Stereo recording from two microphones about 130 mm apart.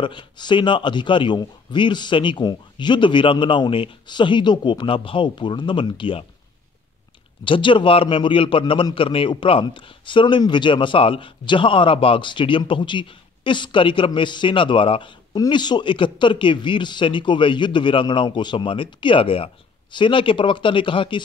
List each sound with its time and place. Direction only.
0.0 s speech: 40° left (ahead or behind)
7.4 s speech: 40° left (ahead or behind)